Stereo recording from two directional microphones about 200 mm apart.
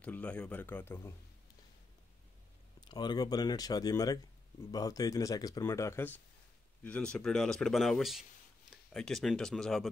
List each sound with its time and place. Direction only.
0.0 s speech: 5° left (ahead or behind)
2.8 s speech: 20° left (ahead or behind); by 9.8 s centre (ahead or behind)